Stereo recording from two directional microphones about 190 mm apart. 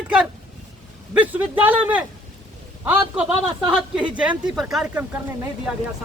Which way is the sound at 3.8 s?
5° right (ahead or behind).